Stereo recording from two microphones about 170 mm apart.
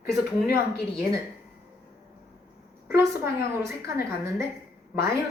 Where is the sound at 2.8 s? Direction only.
15° right (ahead or behind).